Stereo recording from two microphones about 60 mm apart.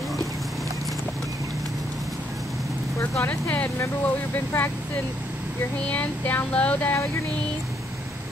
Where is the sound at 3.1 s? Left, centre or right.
Left.